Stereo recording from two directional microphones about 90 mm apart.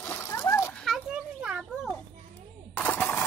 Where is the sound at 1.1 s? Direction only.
10° right (ahead or behind).